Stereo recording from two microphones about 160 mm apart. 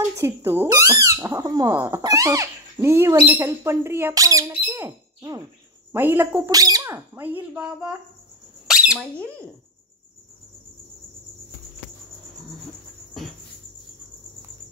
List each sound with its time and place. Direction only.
0.2 s speech: 15° right (ahead or behind)
8.9 s speech: 5° left (ahead or behind)